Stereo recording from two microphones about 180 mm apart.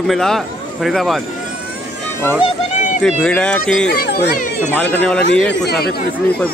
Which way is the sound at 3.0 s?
5° left (ahead or behind).